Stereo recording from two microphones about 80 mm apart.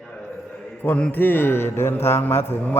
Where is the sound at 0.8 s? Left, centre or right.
Centre.